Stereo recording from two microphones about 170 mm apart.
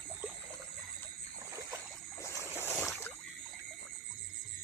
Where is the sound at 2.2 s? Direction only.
20° left (ahead or behind).